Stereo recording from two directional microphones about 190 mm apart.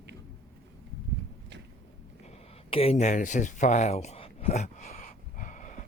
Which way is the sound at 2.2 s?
30° left (ahead or behind).